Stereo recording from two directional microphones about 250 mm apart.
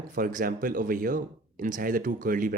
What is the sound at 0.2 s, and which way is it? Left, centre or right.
Speech, right.